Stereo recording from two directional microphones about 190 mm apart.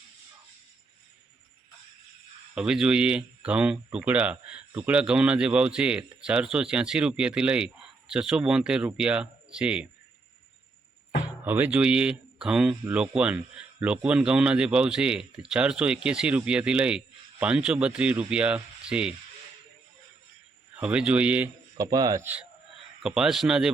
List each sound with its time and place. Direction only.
2.6 s speech: 5° right (ahead or behind)
11.4 s speech: 10° right (ahead or behind)
20.7 s a man's voice: 5° right (ahead or behind)
21.8 s speech: 20° right (ahead or behind); by 23.7 s 5° right (ahead or behind)